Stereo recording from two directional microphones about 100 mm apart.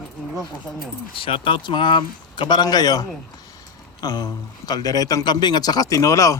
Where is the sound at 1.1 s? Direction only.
60° left (ahead or behind); by 6.4 s 35° left (ahead or behind).